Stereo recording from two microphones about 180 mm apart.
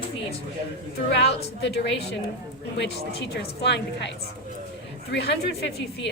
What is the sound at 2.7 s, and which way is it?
A woman's voice, 70° left (ahead or behind).